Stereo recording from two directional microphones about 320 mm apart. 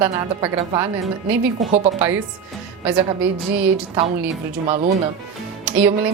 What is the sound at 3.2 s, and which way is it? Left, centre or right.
Speech, centre.